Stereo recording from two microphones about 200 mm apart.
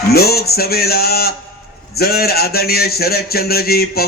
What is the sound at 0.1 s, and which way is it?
Speech, 50° left (ahead or behind).